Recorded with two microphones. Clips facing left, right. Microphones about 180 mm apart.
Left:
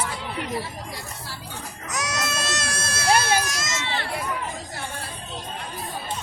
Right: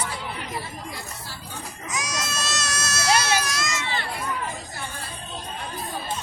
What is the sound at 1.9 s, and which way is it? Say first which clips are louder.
Goat: left 3 dB; 65° left (ahead or behind).